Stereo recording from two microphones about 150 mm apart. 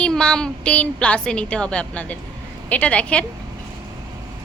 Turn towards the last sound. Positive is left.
turn(degrees=10)  # may be behind; listen again after turning